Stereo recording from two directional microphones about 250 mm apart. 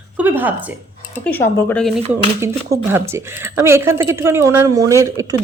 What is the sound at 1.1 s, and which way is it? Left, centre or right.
Speech, centre.